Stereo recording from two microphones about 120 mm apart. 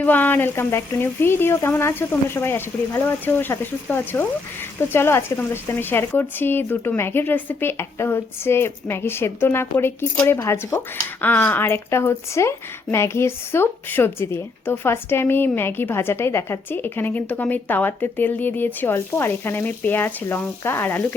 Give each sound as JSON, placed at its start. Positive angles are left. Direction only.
{"t": 0.0, "sound": "speech", "side_deg": 15}